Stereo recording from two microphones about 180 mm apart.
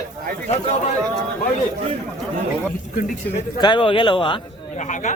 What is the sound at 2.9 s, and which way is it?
Speech, 50° left (ahead or behind).